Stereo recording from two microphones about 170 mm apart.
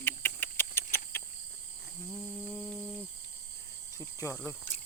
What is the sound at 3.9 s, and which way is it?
Speech, 20° left (ahead or behind).